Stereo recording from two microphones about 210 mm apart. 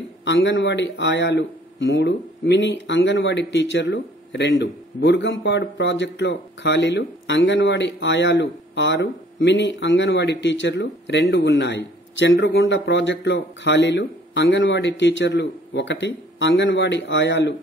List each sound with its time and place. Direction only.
0.2 s speech: 60° left (ahead or behind)